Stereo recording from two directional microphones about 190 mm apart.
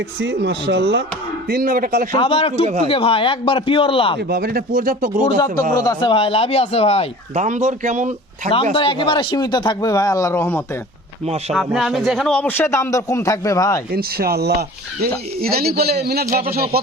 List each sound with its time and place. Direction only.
0.2 s speech: 60° right (ahead or behind)
1.5 s speech: 50° right (ahead or behind)
2.1 s speech: 30° left (ahead or behind)
4.2 s speech: 55° right (ahead or behind)
5.7 s speech: 20° left (ahead or behind)
7.3 s speech: 40° right (ahead or behind)
8.7 s speech: 25° left (ahead or behind); by 10.6 s 10° left (ahead or behind)
11.5 s a man's voice: centre (ahead or behind); by 13.8 s 15° left (ahead or behind)
13.9 s speech: 55° right (ahead or behind)